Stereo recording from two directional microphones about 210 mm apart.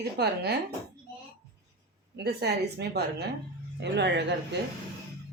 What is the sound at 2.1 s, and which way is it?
Speech, 50° right (ahead or behind).